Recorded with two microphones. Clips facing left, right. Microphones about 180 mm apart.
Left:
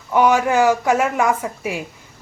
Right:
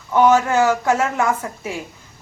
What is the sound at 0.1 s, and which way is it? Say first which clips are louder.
Speech: right 1 dB; 15° left (ahead or behind).